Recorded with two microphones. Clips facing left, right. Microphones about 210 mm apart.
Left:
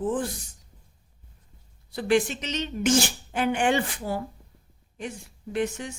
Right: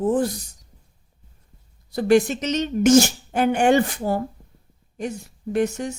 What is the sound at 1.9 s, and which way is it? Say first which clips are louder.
A woman's voice: right 6 dB; 40° right (ahead or behind).